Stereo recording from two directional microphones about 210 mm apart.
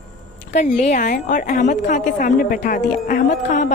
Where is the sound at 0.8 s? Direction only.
35° left (ahead or behind).